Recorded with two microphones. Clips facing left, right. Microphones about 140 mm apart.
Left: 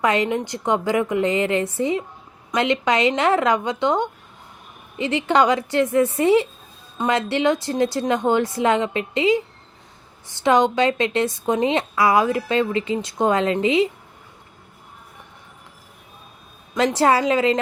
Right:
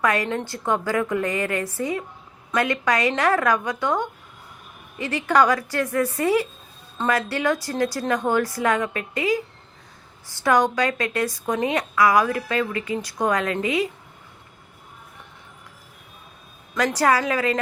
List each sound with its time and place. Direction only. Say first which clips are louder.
0.0 s speech: left 3 dB; 20° left (ahead or behind)
16.7 s speech: left 3 dB; 25° left (ahead or behind)